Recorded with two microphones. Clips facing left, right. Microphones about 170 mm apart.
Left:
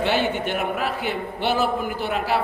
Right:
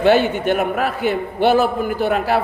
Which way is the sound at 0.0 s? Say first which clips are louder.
Right 7 dB; 50° right (ahead or behind).